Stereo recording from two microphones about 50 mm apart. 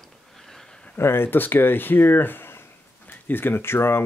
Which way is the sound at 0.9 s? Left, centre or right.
Left.